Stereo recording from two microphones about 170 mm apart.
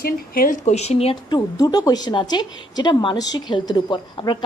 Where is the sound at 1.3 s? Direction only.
25° left (ahead or behind).